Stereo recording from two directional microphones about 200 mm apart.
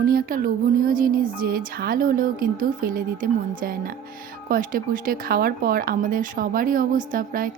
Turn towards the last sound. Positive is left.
turn(degrees=-45)  # may be behind; listen again after turning